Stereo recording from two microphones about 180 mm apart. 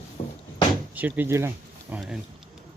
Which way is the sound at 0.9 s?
10° right (ahead or behind).